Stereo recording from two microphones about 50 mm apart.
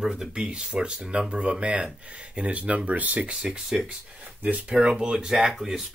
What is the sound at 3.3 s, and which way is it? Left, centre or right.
Speech, centre.